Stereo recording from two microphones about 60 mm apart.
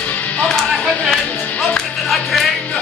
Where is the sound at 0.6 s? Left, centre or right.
Centre.